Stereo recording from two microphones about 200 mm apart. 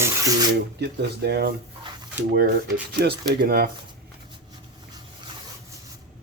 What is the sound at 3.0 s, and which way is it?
Speech, 50° right (ahead or behind).